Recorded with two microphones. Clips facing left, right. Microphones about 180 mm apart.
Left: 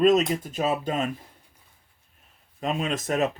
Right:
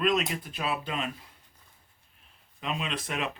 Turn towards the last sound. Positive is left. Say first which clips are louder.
# left 8 dB
turn(degrees=45)  # may be behind; listen again after turning